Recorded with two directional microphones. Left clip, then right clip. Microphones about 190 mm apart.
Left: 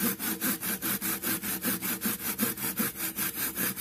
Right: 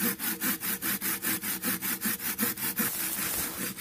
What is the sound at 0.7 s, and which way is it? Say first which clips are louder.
Wood: even; 10° left (ahead or behind).